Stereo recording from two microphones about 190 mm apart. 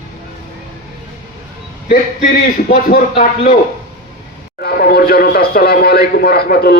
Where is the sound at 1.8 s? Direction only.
50° left (ahead or behind).